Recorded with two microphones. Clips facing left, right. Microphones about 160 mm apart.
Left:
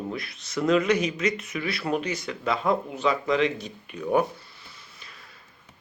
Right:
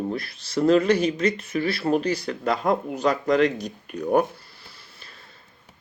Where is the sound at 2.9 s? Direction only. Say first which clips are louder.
Right 3 dB; 45° right (ahead or behind).